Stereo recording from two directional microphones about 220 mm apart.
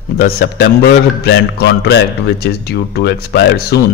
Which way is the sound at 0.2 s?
45° left (ahead or behind).